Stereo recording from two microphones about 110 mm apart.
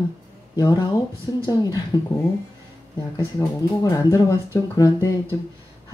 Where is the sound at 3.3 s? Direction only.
30° left (ahead or behind).